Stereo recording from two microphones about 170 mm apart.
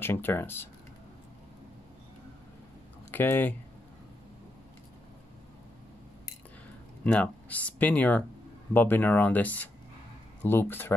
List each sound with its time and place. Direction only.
0.0 s speech: 15° left (ahead or behind)
3.1 s speech: 10° left (ahead or behind)
7.1 s speech: 10° left (ahead or behind)